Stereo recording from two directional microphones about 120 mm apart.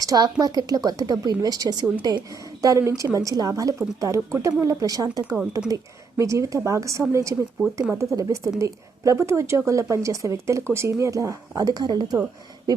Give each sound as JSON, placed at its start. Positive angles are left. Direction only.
{"t": 0.0, "sound": "a woman's voice", "side_deg": -30}